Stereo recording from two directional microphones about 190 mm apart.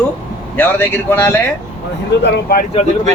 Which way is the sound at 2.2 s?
55° left (ahead or behind).